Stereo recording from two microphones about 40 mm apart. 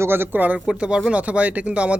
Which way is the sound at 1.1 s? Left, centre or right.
Right.